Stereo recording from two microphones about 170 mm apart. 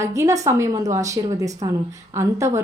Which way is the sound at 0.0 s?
20° right (ahead or behind).